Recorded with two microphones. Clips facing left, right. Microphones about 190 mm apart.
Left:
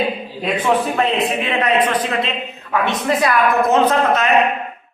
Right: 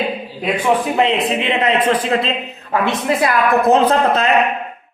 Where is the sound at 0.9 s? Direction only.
20° right (ahead or behind).